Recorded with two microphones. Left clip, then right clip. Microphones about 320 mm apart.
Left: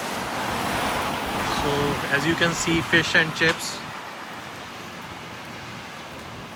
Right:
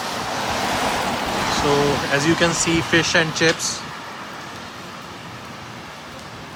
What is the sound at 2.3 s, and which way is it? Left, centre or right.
Speech, centre.